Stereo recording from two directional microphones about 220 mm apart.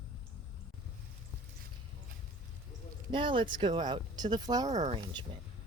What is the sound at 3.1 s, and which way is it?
Speech, 20° right (ahead or behind).